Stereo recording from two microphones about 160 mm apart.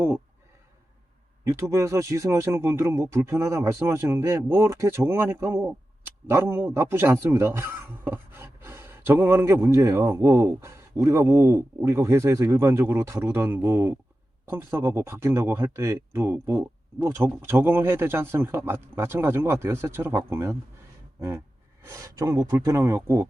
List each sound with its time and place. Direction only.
1.5 s speech: 15° right (ahead or behind)
21.8 s speech: 20° right (ahead or behind)